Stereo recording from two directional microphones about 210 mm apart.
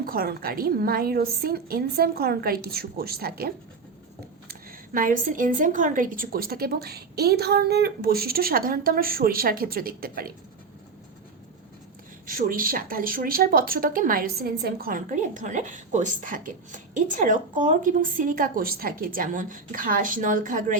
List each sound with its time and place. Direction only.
0.0 s a woman's voice: 45° right (ahead or behind)
4.9 s a woman's voice: 40° right (ahead or behind)
12.2 s speech: 40° right (ahead or behind)